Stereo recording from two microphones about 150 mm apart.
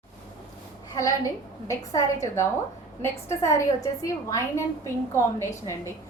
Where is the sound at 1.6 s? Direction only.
20° left (ahead or behind).